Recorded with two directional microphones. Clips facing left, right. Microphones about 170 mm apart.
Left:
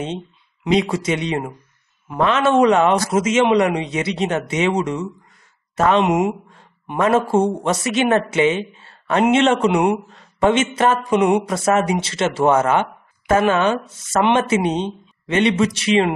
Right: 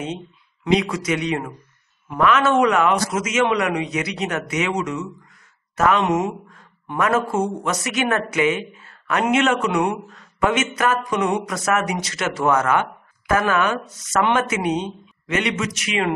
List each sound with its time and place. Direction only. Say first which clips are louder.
0.7 s speech: left 4 dB; 25° left (ahead or behind)
6.0 s speech: left 3 dB; 10° left (ahead or behind)
6.4 s speech: left 2 dB; 30° left (ahead or behind)